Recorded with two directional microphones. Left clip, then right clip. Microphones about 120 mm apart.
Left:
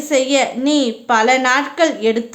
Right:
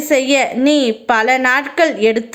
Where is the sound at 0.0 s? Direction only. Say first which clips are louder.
Right 2 dB; 35° right (ahead or behind).